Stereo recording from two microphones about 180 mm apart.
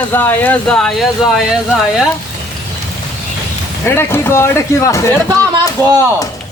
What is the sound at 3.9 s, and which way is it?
Speech, 15° left (ahead or behind).